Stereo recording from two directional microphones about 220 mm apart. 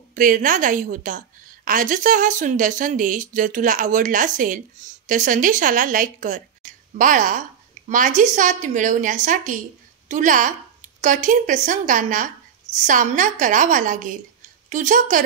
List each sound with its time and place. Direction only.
0.1 s a woman's voice: 35° right (ahead or behind)